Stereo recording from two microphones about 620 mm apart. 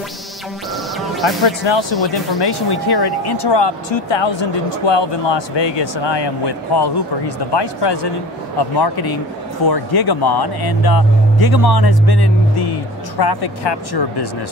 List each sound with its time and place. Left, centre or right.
0.9 s music: centre
1.4 s speech: left